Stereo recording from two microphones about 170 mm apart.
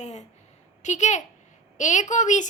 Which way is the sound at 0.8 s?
45° left (ahead or behind).